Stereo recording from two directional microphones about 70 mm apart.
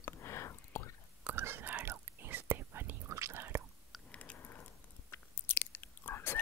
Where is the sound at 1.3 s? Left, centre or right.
Right.